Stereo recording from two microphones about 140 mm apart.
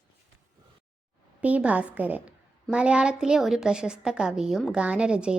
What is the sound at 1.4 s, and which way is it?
A woman's voice, 10° right (ahead or behind).